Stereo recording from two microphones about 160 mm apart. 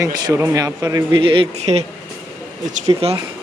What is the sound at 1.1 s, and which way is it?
Speech, 35° right (ahead or behind).